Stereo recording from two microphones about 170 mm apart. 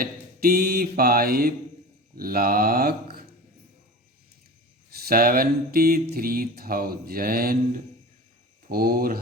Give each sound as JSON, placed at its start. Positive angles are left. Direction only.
{"t": 0.0, "sound": "mantra", "side_deg": -60}
{"t": 4.9, "sound": "mantra", "side_deg": -65}